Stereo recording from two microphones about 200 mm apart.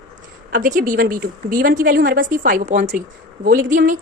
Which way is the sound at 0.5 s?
40° right (ahead or behind).